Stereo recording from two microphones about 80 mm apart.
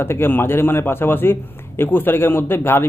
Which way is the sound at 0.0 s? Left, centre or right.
Left.